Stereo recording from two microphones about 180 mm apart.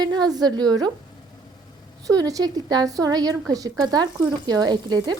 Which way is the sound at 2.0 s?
20° right (ahead or behind).